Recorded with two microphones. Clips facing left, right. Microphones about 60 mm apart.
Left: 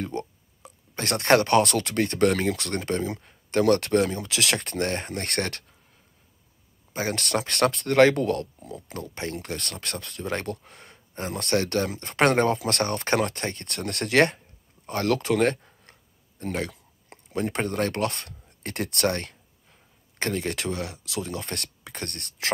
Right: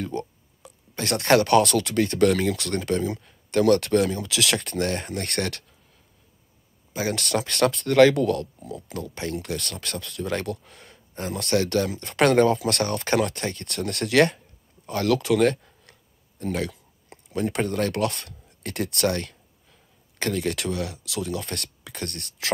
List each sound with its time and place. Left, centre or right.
0.0 s speech: left
6.9 s speech: left
14.9 s a sound: left
17.3 s speech: left